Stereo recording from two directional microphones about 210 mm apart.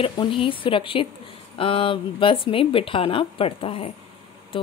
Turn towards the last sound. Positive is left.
turn(degrees=25)  # may be behind; listen again after turning